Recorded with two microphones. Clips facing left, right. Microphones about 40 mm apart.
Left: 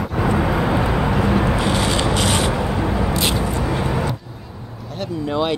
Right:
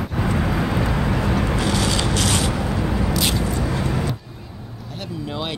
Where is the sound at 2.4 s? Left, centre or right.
Left.